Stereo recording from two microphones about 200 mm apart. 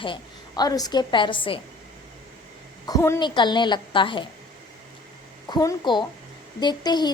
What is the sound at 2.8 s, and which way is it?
A woman's voice, 15° left (ahead or behind).